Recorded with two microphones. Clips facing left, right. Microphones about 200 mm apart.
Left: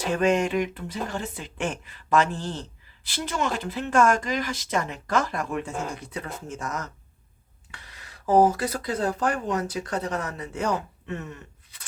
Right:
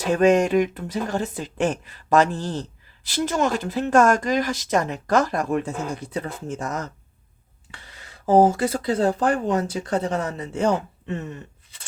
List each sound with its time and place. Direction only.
0.0 s speech: 45° right (ahead or behind); by 11.9 s 30° right (ahead or behind)